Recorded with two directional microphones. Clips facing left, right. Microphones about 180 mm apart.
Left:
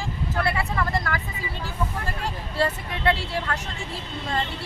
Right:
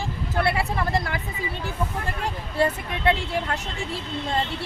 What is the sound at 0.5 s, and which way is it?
Speech, 30° right (ahead or behind).